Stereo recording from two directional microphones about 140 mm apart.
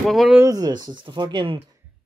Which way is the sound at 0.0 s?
Centre (ahead or behind).